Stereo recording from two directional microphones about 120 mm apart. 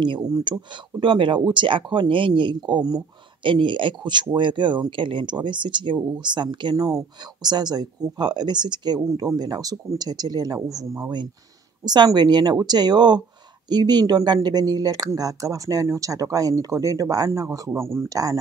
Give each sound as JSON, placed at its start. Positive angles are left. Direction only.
{"t": 0.0, "sound": "speech", "side_deg": -35}